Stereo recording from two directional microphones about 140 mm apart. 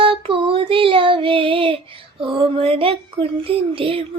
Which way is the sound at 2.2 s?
40° right (ahead or behind).